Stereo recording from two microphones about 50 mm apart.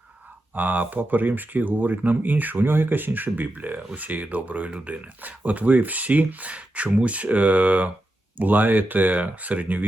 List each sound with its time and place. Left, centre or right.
0.5 s speech: right